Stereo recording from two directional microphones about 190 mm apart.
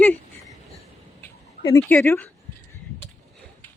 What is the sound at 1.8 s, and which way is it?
Speech, 10° left (ahead or behind).